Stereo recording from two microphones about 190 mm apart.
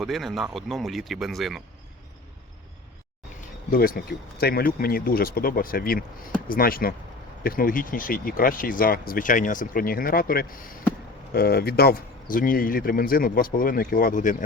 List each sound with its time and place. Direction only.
0.0 s speech: centre (ahead or behind)
3.7 s speech: 50° left (ahead or behind)